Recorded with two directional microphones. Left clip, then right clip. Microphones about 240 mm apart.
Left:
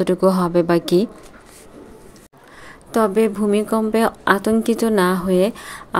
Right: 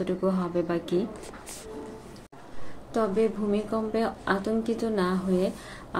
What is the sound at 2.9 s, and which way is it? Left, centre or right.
Speech, left.